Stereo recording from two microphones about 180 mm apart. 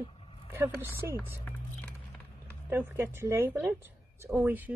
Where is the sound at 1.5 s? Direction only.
10° left (ahead or behind).